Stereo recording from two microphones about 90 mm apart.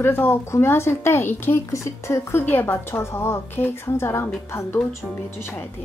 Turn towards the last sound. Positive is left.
turn(degrees=30)  # may be behind; listen again after turning